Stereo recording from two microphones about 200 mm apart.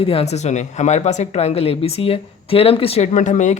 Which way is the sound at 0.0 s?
30° left (ahead or behind).